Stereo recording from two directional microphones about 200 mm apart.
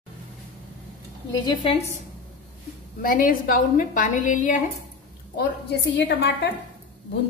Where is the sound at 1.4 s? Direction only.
25° left (ahead or behind).